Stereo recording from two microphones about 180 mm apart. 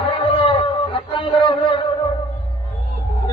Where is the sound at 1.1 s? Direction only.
30° left (ahead or behind).